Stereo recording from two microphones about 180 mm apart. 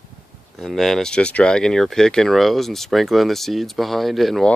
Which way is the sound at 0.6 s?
Centre (ahead or behind).